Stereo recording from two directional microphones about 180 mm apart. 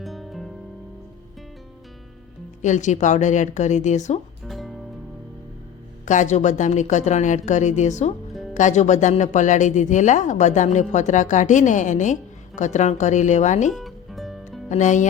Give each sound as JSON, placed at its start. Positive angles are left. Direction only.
{"t": 0.0, "sound": "music", "side_deg": 0}
{"t": 2.6, "sound": "a woman's voice", "side_deg": 40}
{"t": 4.4, "sound": "music", "side_deg": 0}
{"t": 6.1, "sound": "a woman's voice", "side_deg": 40}
{"t": 8.3, "sound": "music", "side_deg": 0}
{"t": 8.5, "sound": "a woman's voice", "side_deg": 40}
{"t": 13.7, "sound": "music", "side_deg": 0}
{"t": 14.7, "sound": "a woman's voice", "side_deg": 45}